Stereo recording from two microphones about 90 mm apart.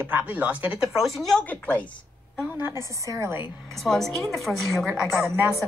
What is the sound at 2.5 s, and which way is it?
Speech, 25° right (ahead or behind).